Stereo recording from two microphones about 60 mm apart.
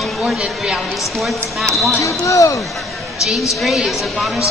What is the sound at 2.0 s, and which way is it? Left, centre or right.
Speech, left.